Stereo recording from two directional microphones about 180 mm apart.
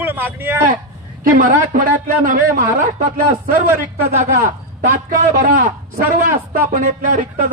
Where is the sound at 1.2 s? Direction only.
50° right (ahead or behind).